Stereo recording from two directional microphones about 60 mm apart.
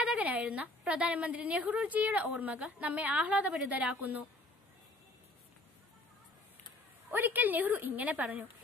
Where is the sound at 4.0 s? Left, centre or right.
Right.